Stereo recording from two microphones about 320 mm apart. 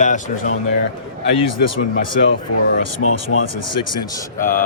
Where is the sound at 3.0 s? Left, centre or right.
Left.